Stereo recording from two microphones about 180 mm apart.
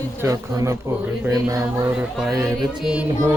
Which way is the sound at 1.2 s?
15° right (ahead or behind).